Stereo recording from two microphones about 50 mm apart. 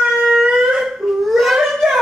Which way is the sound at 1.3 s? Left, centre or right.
Centre.